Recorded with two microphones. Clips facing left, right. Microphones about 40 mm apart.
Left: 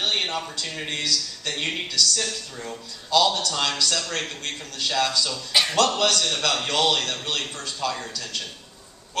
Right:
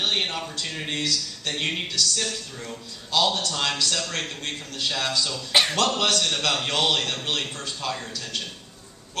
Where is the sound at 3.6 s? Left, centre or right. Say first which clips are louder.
Left 1 dB; centre.